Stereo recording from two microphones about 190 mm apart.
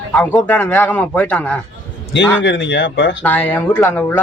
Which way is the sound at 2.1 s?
70° left (ahead or behind).